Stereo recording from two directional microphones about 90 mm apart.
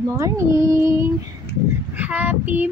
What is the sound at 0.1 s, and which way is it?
Child singing, 35° right (ahead or behind).